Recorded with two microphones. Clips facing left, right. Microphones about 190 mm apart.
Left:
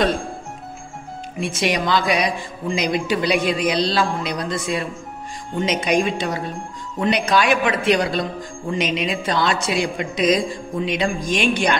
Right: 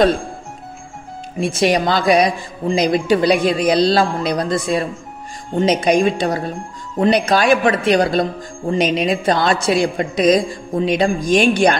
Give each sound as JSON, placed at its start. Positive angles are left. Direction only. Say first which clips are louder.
{"t": 1.4, "sound": "speech", "louder": "right 6 dB", "side_deg": -35}